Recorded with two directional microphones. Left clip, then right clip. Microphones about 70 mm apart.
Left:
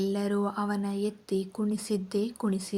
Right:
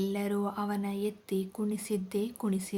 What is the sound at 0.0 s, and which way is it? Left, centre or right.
A woman's voice, left.